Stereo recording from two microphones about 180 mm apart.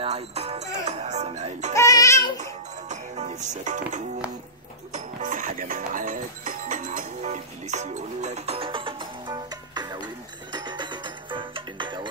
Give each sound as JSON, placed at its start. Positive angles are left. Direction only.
{"t": 0.0, "sound": "music", "side_deg": -35}
{"t": 1.8, "sound": "a sound", "side_deg": 20}
{"t": 2.9, "sound": "music", "side_deg": -40}